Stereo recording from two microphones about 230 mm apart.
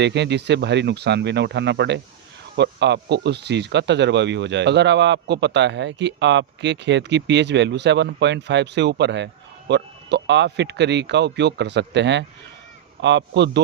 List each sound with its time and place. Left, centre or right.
0.0 s speech: right